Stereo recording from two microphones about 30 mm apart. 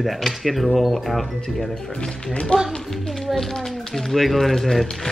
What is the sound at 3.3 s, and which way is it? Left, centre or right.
Speech, centre.